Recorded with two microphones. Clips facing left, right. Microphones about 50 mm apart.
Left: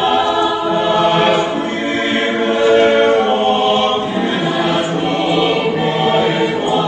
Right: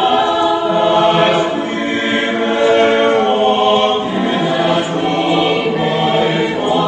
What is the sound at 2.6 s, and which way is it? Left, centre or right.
Music, centre.